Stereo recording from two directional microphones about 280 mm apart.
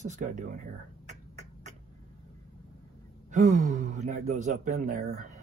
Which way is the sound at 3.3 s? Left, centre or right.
Right.